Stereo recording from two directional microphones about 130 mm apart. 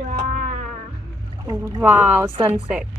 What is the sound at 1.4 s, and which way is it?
Speech, 25° right (ahead or behind).